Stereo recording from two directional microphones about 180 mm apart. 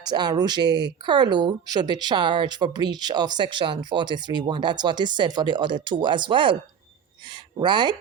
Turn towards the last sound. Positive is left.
turn(degrees=-25)  # may be behind; listen again after turning